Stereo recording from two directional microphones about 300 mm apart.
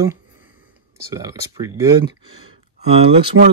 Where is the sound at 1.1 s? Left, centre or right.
Centre.